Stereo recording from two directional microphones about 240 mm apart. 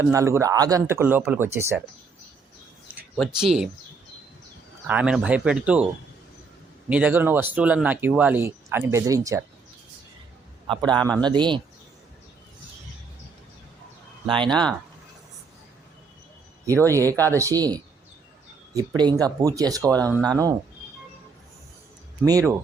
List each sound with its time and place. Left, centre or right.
0.0 s speech: centre
3.2 s speech: centre
4.9 s speech: centre
10.7 s speech: centre
14.3 s speech: centre
16.9 s speech: centre
22.2 s speech: centre